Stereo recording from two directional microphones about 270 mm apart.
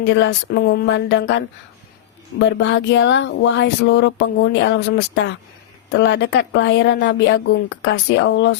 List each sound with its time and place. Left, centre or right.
0.0 s speech: left